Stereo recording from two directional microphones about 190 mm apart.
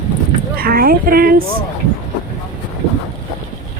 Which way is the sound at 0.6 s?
50° right (ahead or behind).